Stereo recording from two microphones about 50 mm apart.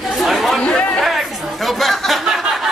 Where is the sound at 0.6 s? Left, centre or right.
Left.